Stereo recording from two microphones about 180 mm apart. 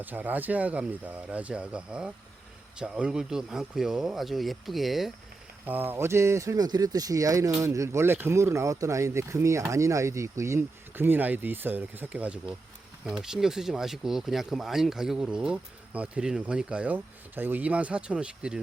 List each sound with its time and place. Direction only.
0.0 s speech: 10° right (ahead or behind)